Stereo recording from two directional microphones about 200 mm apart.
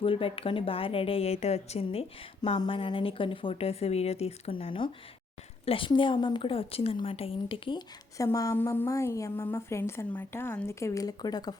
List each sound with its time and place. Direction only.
0.0 s a woman's voice: 25° left (ahead or behind)